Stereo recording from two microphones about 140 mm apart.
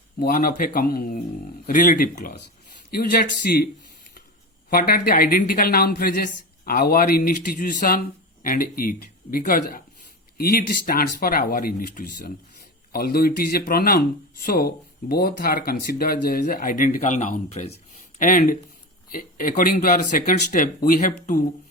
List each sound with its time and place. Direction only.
0.2 s speech: 90° left
1.6 s speech: 75° left (ahead or behind); by 3.7 s 90° left
4.7 s speech: 90° left; by 17.7 s 55° left (ahead or behind)
18.2 s speech: 75° left (ahead or behind)
19.1 s speech: 85° left; by 21.4 s 65° left (ahead or behind)